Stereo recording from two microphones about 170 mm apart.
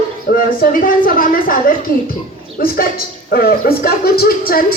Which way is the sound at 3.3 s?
65° left (ahead or behind).